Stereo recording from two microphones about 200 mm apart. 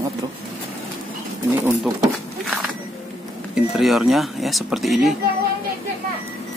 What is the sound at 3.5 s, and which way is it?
Speech, centre (ahead or behind).